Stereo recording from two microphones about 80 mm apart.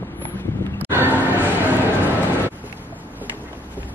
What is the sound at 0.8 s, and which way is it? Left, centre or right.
Music, right.